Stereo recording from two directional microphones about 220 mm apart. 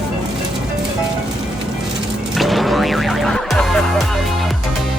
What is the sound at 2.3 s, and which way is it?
Music, centre (ahead or behind).